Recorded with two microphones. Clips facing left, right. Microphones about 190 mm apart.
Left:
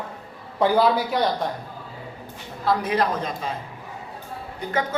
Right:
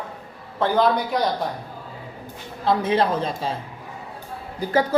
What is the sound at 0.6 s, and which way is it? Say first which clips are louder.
Speech: left 1 dB; 10° left (ahead or behind).